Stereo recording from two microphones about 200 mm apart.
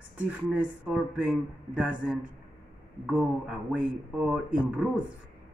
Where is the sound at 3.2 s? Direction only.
5° right (ahead or behind).